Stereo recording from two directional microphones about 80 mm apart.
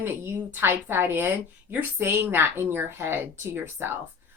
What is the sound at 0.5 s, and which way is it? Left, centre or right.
Speech, right.